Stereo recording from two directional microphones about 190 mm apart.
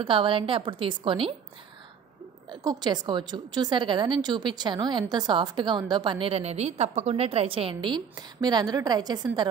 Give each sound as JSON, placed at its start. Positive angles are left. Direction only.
{"t": 0.0, "sound": "a woman's voice", "side_deg": -25}
{"t": 2.5, "sound": "a woman's voice", "side_deg": -20}